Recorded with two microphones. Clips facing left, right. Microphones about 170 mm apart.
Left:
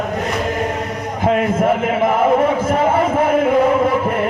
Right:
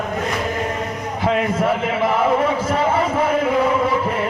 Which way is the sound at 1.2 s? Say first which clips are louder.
Left 3 dB; 50° left (ahead or behind).